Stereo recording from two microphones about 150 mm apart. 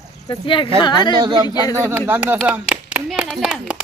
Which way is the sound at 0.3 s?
35° left (ahead or behind).